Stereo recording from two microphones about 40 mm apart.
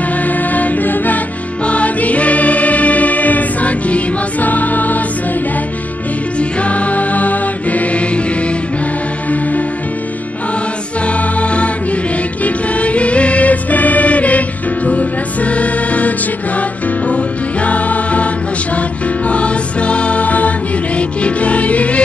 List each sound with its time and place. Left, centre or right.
0.2 s music: left
1.7 s music: left
6.6 s music: left
11.1 s music: left
17.1 s music: left